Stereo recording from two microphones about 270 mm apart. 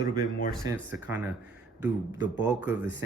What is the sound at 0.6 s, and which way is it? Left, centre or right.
Speech, centre.